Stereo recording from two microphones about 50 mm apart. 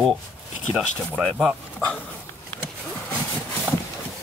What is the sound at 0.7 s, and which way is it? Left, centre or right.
Speech, right.